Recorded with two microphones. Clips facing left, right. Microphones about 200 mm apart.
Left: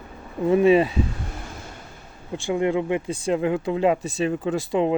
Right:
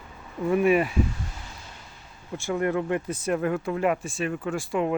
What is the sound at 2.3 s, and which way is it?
Speech, 15° left (ahead or behind).